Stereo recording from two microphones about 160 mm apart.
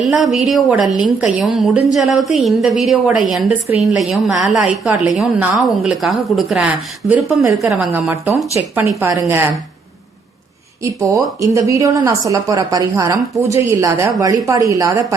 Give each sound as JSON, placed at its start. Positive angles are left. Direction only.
{"t": 0.1, "sound": "a woman's voice", "side_deg": 0}
{"t": 7.4, "sound": "a woman's voice", "side_deg": -20}
{"t": 10.8, "sound": "a woman's voice", "side_deg": -20}